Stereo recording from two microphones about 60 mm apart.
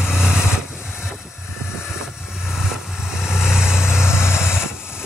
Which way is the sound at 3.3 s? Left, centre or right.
Centre.